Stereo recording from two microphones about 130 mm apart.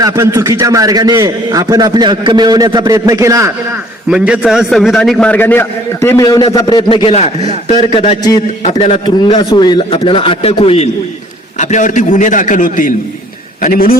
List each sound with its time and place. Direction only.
0.0 s a man's voice: 25° right (ahead or behind)
4.1 s a man's voice: 5° right (ahead or behind); by 9.0 s 55° left (ahead or behind)
9.4 s a man's voice: 35° left (ahead or behind); by 10.8 s 50° left (ahead or behind)
11.5 s a man's voice: 70° left (ahead or behind); by 12.9 s 90° left